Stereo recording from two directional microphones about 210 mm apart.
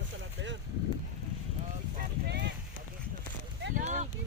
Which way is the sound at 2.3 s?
55° right (ahead or behind).